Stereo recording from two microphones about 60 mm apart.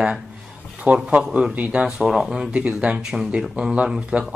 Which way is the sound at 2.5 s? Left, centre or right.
Right.